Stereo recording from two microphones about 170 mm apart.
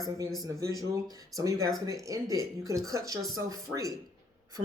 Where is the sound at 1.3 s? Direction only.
20° right (ahead or behind).